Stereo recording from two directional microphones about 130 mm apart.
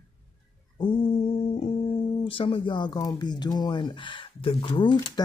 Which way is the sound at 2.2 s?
40° left (ahead or behind).